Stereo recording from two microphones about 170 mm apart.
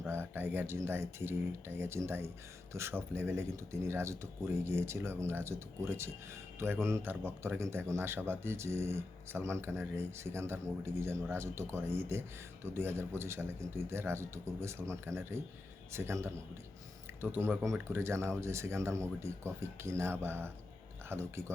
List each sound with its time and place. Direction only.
0.1 s speech: 15° right (ahead or behind)